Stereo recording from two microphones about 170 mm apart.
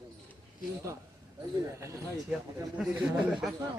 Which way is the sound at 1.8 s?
20° right (ahead or behind).